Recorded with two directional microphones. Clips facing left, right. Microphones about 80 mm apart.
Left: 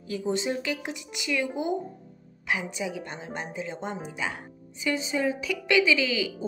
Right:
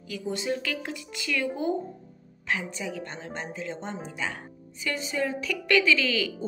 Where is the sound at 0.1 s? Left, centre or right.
Left.